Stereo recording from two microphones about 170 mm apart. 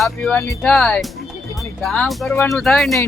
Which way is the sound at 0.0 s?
10° left (ahead or behind).